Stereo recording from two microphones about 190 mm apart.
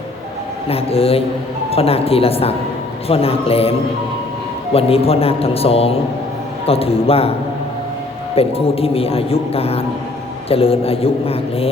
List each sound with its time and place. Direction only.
0.7 s speech: 30° left (ahead or behind)
8.4 s speech: 30° left (ahead or behind)